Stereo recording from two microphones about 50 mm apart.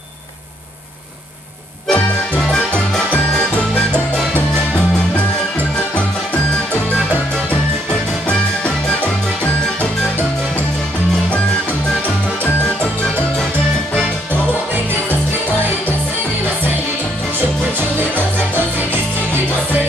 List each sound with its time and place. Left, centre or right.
1.9 s music: left
8.3 s music: left